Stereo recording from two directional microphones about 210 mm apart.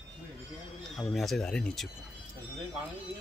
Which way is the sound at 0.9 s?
Centre (ahead or behind).